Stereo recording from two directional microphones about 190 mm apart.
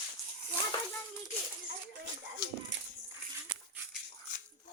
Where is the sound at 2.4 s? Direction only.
55° left (ahead or behind).